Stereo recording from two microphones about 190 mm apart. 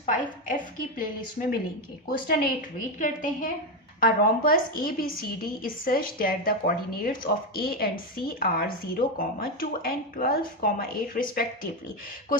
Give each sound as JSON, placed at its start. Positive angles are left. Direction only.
{"t": 0.0, "sound": "a woman's voice", "side_deg": 45}